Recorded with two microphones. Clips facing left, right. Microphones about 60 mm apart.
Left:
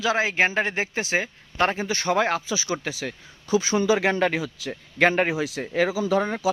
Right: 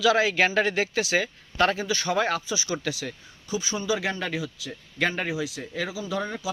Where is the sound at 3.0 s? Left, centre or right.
Left.